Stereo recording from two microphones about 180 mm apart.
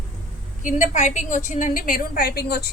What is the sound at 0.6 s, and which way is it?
A woman's voice, 45° left (ahead or behind).